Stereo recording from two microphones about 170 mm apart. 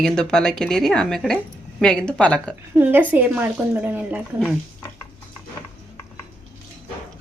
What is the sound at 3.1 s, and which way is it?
Speech, 10° right (ahead or behind).